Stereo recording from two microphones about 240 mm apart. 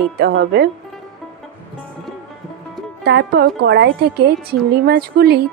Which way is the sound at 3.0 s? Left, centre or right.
Right.